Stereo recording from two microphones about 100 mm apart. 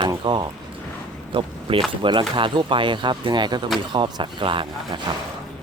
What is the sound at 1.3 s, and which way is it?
Speech, 60° right (ahead or behind).